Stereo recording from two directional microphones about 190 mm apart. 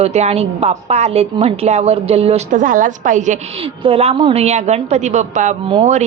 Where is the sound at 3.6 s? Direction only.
30° right (ahead or behind).